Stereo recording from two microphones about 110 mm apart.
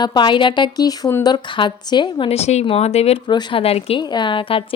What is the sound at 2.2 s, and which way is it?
Speech, 75° left (ahead or behind).